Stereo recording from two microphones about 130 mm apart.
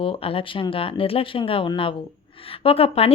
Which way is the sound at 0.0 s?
45° left (ahead or behind).